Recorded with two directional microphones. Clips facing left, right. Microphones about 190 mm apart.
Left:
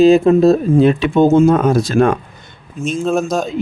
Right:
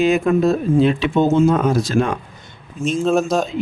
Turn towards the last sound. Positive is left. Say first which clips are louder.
# even
turn(degrees=0)  # may be behind; listen again after turning